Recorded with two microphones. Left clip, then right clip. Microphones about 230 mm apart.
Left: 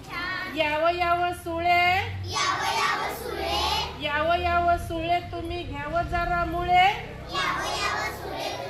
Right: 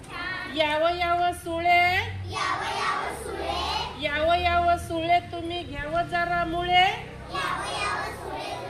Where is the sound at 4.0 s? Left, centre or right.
Right.